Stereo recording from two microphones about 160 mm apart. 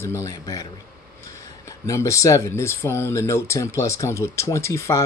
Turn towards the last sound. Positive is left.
turn(degrees=15)  # may be behind; listen again after turning